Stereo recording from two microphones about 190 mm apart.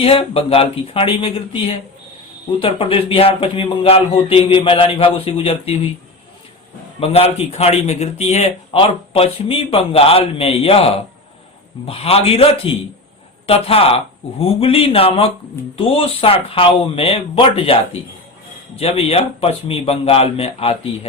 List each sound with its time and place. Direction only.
0.0 s speech: 30° left (ahead or behind)
7.0 s a man's voice: 30° left (ahead or behind)
18.8 s a man's voice: 30° left (ahead or behind)